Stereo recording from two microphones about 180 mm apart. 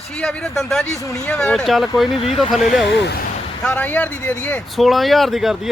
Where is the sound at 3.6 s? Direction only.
5° left (ahead or behind).